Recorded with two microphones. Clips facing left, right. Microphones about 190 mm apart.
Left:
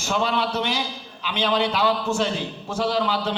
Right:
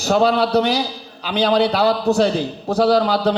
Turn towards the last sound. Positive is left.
turn(degrees=-40)  # may be behind; listen again after turning